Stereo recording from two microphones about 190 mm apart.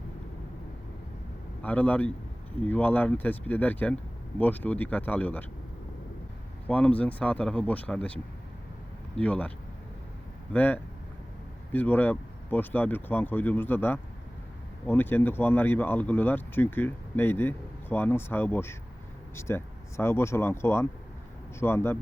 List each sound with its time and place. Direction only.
1.6 s speech: 10° left (ahead or behind)
6.7 s speech: 5° left (ahead or behind)
10.5 s speech: 10° left (ahead or behind)